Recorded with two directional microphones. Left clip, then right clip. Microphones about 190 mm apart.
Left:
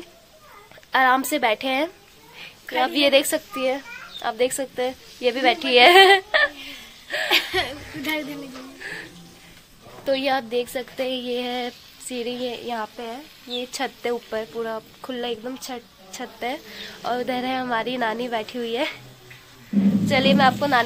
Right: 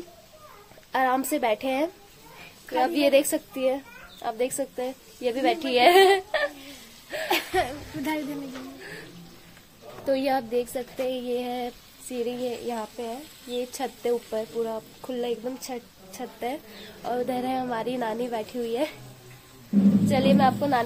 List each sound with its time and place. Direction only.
0.9 s a woman's voice: centre (ahead or behind)
7.2 s a woman's voice: 50° right (ahead or behind)
10.0 s a woman's voice: 5° right (ahead or behind)
20.1 s a woman's voice: 5° left (ahead or behind)